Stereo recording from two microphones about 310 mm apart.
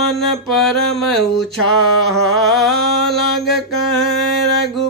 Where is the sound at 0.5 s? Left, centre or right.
Centre.